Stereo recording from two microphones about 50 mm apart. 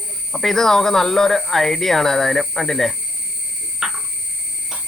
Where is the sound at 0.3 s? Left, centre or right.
Centre.